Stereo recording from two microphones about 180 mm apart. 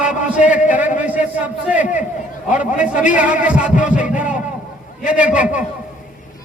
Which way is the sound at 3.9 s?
45° left (ahead or behind).